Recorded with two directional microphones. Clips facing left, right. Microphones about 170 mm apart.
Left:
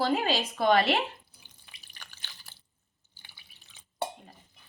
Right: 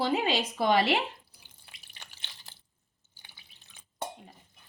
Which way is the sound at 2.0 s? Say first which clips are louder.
Even; 25° right (ahead or behind).